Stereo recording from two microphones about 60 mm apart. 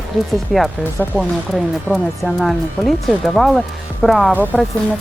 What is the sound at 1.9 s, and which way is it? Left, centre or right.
Speech, centre.